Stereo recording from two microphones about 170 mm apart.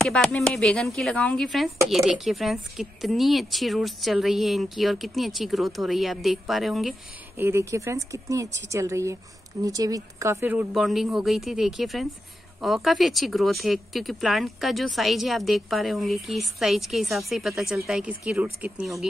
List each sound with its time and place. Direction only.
0.0 s speech: 5° left (ahead or behind)
7.3 s a woman's voice: 15° right (ahead or behind)